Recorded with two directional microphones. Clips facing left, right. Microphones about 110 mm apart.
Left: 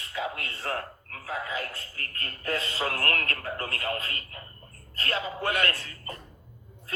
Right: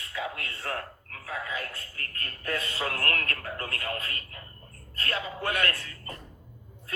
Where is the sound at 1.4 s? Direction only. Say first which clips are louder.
Left 1 dB; 30° left (ahead or behind).